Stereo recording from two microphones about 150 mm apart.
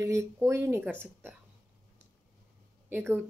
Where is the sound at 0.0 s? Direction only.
20° right (ahead or behind).